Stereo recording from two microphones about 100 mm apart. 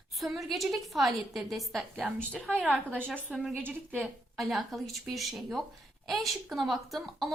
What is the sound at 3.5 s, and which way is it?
Speech, 15° right (ahead or behind).